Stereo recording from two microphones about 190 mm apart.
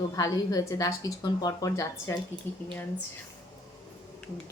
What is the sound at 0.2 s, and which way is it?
A woman's voice, 20° left (ahead or behind).